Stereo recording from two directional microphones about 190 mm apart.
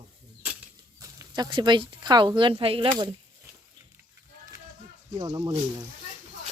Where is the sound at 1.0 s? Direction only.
20° right (ahead or behind).